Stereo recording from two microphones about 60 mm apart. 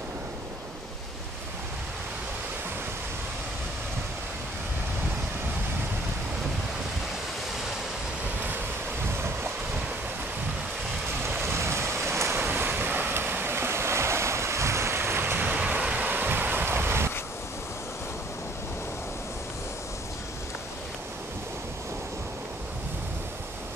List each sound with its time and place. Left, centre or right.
8.5 s waves: right
11.2 s waves: right
12.4 s waves: right
15.6 s waves: right